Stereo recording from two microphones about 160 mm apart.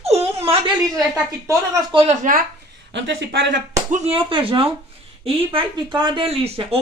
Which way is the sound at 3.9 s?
40° right (ahead or behind).